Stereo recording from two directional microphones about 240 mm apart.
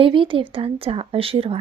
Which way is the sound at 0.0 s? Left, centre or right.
Right.